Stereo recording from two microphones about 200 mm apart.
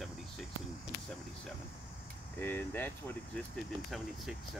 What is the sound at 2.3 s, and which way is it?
Speech, 10° left (ahead or behind).